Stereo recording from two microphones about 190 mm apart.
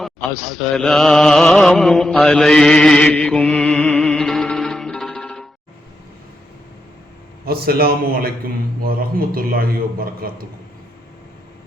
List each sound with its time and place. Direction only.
0.0 s mantra: centre (ahead or behind)
7.4 s a man's voice: 55° right (ahead or behind)